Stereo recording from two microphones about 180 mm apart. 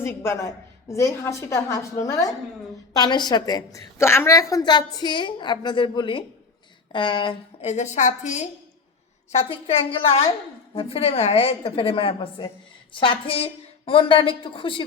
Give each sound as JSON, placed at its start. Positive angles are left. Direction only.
{"t": 0.0, "sound": "a woman's voice", "side_deg": 15}